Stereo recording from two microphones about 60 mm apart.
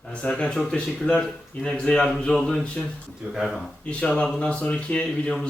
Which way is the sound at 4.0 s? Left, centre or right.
Left.